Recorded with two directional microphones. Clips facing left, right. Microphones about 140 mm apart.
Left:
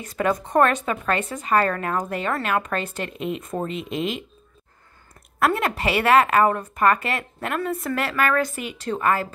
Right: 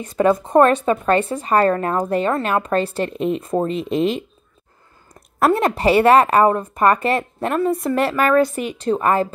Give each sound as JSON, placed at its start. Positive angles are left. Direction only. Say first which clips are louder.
{"t": 0.0, "sound": "a woman's voice", "louder": "right 7 dB", "side_deg": -30}
{"t": 5.4, "sound": "a woman's voice", "louder": "right 6 dB", "side_deg": -30}